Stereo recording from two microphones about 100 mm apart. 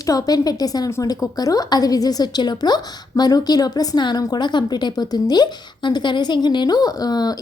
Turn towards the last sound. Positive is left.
turn(degrees=40)  # may be behind; listen again after turning